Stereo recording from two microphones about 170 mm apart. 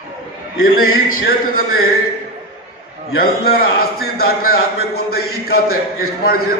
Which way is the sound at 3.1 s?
60° left (ahead or behind).